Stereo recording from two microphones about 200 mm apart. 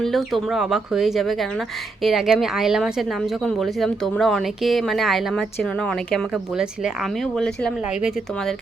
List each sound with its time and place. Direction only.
0.0 s speech: centre (ahead or behind)